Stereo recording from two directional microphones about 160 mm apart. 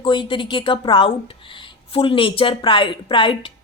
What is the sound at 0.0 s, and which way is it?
A woman's voice, 30° left (ahead or behind).